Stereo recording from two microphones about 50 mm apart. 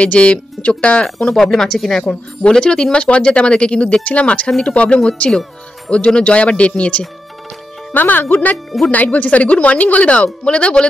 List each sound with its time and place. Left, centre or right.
0.0 s speech: left
1.3 s speech: centre
2.0 s speech: centre
7.9 s speech: left